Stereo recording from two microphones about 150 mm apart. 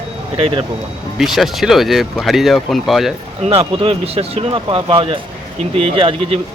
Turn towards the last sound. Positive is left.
turn(degrees=-40)  # may be behind; listen again after turning